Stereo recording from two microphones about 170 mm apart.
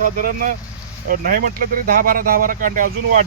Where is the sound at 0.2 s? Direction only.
60° right (ahead or behind).